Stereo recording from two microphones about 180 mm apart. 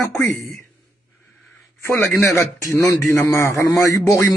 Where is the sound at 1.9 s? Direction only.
15° left (ahead or behind).